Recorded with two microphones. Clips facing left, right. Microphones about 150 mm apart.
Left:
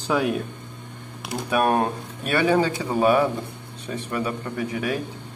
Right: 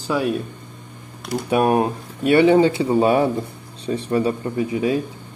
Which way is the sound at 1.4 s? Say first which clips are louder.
Right 3 dB; 20° right (ahead or behind).